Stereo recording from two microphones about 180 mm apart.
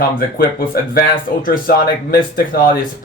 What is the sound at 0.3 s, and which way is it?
Speech, 55° left (ahead or behind).